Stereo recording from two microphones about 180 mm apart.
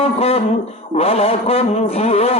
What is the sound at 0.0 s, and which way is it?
Speech, 35° left (ahead or behind).